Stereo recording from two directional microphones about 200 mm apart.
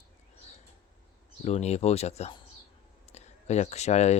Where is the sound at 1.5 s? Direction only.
35° left (ahead or behind).